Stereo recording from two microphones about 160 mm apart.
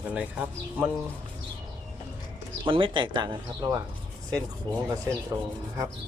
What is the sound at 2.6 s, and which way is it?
Speech, 30° right (ahead or behind).